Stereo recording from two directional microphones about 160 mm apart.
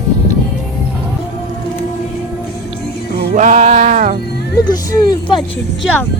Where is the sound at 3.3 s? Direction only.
50° right (ahead or behind).